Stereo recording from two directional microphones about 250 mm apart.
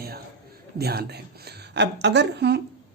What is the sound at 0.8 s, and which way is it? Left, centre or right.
Speech, right.